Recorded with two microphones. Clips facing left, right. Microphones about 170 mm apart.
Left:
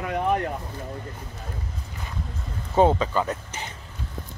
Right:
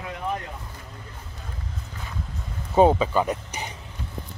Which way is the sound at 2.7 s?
10° right (ahead or behind).